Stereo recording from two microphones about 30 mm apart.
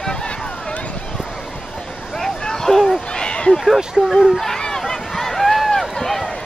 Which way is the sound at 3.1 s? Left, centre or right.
Left.